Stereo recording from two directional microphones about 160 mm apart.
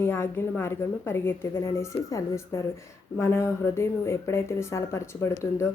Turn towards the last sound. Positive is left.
turn(degrees=15)  # may be behind; listen again after turning